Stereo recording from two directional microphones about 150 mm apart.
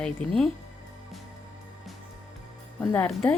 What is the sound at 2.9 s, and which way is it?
Speech, 5° left (ahead or behind).